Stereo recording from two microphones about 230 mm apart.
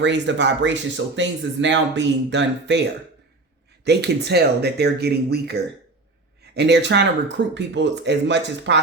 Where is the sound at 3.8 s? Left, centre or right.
Right.